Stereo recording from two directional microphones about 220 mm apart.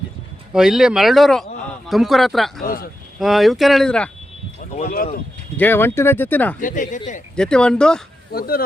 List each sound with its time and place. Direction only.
0.5 s speech: 5° right (ahead or behind)
2.6 s speech: 40° left (ahead or behind)
3.2 s speech: centre (ahead or behind)
4.7 s speech: 40° left (ahead or behind)
5.5 s speech: 10° left (ahead or behind)
6.6 s speech: 35° left (ahead or behind)
7.3 s speech: 5° left (ahead or behind)
8.3 s speech: 45° left (ahead or behind)